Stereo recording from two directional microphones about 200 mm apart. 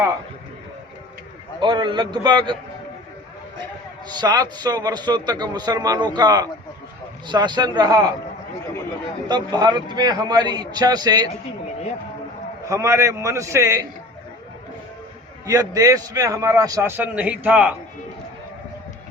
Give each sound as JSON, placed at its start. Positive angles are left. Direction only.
{"t": 1.5, "sound": "a man's voice", "side_deg": -20}
{"t": 4.2, "sound": "a man's voice", "side_deg": -20}
{"t": 9.3, "sound": "a man's voice", "side_deg": -20}
{"t": 12.6, "sound": "a man's voice", "side_deg": -15}
{"t": 15.4, "sound": "a man's voice", "side_deg": -15}